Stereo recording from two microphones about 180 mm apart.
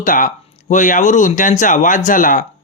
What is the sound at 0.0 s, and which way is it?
Speech, 45° left (ahead or behind).